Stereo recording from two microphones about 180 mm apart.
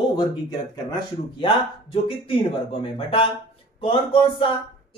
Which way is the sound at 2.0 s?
30° left (ahead or behind).